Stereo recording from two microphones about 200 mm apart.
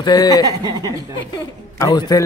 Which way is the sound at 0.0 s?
20° left (ahead or behind).